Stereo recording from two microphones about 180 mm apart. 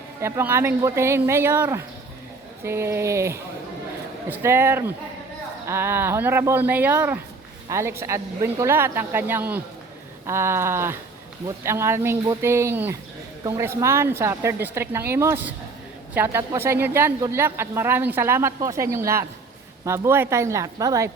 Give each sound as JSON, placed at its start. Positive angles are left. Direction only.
{"t": 0.2, "sound": "a woman's voice", "side_deg": -15}